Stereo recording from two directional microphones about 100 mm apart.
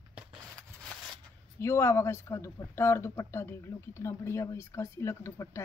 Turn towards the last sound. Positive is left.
turn(degrees=30)  # may be behind; listen again after turning